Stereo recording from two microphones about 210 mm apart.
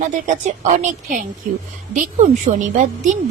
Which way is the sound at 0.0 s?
35° right (ahead or behind).